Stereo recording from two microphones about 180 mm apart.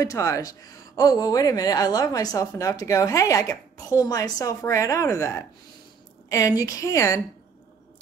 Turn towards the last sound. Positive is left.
turn(degrees=15)  # may be behind; listen again after turning